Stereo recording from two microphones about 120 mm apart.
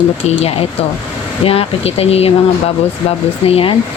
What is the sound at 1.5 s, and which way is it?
Speech, 55° left (ahead or behind).